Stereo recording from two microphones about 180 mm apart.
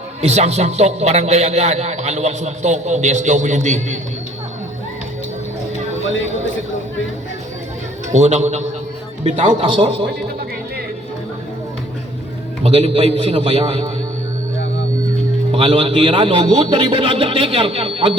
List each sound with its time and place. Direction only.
0.2 s a man's voice: 40° right (ahead or behind)
8.1 s a man's voice: 40° right (ahead or behind)
12.6 s a man's voice: 35° right (ahead or behind)
15.5 s a man's voice: 30° right (ahead or behind)